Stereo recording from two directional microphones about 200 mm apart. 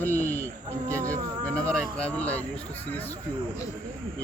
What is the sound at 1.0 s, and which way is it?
Speech, 15° right (ahead or behind).